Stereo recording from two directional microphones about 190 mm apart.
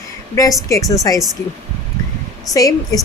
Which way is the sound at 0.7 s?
15° left (ahead or behind).